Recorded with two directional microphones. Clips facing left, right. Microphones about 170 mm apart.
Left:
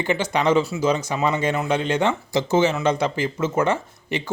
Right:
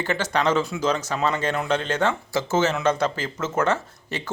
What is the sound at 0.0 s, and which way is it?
Speech, 15° left (ahead or behind).